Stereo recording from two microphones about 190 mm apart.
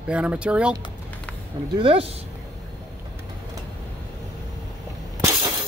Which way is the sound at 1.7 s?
30° right (ahead or behind).